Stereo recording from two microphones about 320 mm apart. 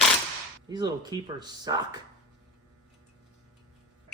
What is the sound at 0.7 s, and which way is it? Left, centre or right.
Speech, centre.